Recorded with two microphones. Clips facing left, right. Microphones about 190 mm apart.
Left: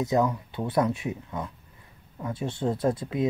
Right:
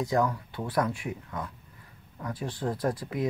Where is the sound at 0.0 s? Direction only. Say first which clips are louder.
Left 2 dB; 20° left (ahead or behind).